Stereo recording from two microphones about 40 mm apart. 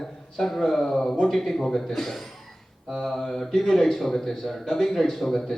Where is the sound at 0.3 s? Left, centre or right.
Centre.